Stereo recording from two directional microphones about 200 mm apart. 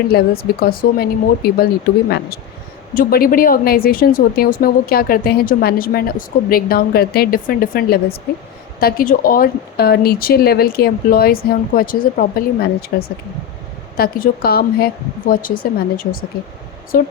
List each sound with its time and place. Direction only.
0.1 s a woman's voice: 50° left (ahead or behind)
16.9 s a woman's voice: 45° left (ahead or behind)